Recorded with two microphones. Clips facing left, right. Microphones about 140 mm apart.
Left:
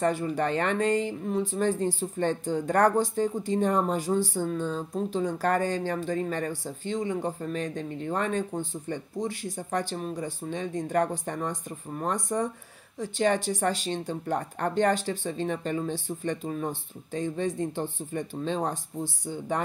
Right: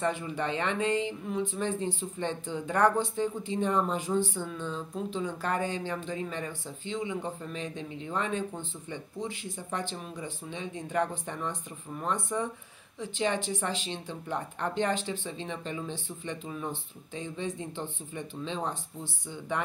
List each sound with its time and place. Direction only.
0.0 s speech: 40° left (ahead or behind)